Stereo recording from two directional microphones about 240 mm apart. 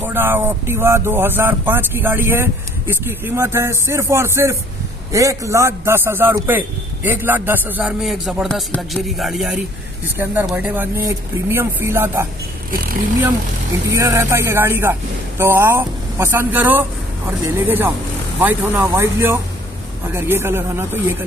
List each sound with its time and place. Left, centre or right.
0.0 s speech: centre
13.8 s speech: centre